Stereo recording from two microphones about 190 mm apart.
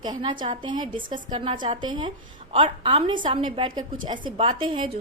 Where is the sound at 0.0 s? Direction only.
25° right (ahead or behind).